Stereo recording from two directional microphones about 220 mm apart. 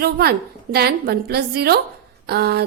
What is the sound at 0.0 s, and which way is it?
A woman's voice, 45° right (ahead or behind).